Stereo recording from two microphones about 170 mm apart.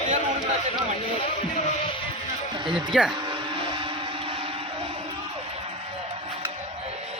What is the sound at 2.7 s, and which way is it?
Speech, 5° right (ahead or behind).